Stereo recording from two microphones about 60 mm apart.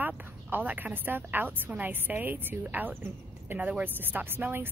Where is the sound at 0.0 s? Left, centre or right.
Right.